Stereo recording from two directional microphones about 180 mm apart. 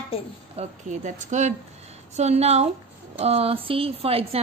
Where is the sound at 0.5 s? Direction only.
40° right (ahead or behind).